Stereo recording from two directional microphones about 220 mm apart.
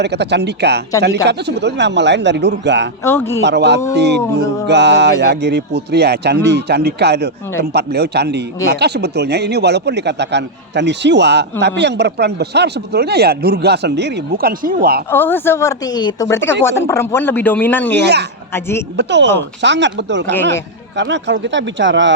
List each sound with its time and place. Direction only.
0.0 s speech: 50° right (ahead or behind)
3.0 s speech: 10° left (ahead or behind)
3.4 s speech: 50° right (ahead or behind)
15.1 s speech: 10° left (ahead or behind)
18.0 s speech: 50° right (ahead or behind)
18.5 s speech: 10° left (ahead or behind)
18.9 s speech: 55° right (ahead or behind)